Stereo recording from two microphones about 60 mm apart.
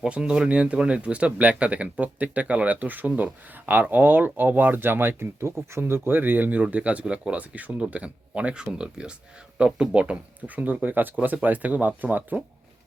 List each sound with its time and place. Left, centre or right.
0.0 s speech: centre
10.4 s speech: right